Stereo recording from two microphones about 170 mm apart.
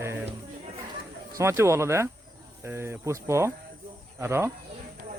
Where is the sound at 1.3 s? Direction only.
15° right (ahead or behind).